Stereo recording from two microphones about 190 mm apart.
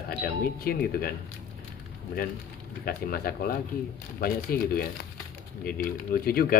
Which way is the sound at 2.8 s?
50° left (ahead or behind).